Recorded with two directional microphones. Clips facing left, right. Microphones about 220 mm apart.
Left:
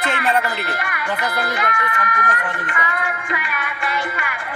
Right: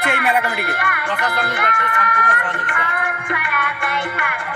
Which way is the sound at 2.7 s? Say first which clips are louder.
Even; 55° right (ahead or behind).